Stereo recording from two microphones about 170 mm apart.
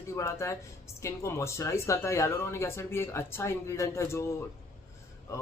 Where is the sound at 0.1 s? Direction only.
15° left (ahead or behind).